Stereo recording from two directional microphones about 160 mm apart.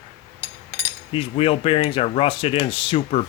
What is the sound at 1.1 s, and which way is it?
Speech, 35° left (ahead or behind).